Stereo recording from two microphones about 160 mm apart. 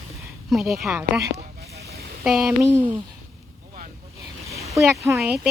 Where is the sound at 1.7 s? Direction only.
85° right.